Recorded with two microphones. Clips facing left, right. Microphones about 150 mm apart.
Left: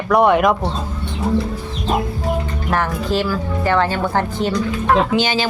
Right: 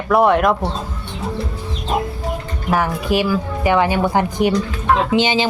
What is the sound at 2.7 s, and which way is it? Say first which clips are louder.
Speech: right 2 dB; 10° right (ahead or behind).